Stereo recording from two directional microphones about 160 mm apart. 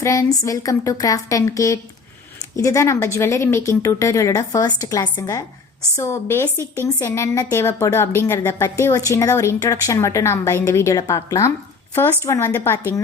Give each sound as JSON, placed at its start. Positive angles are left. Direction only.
{"t": 0.0, "sound": "a woman's voice", "side_deg": 20}